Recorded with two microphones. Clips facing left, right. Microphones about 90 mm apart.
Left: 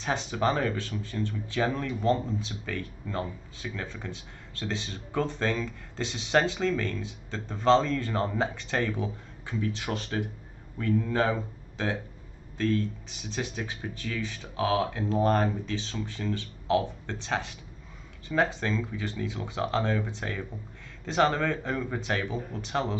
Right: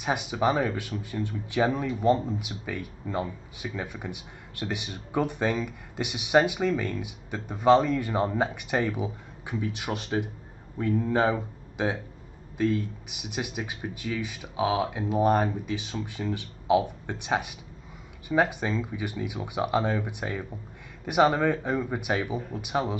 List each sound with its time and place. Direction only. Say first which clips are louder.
0.0 s speech: right 2 dB; 10° right (ahead or behind)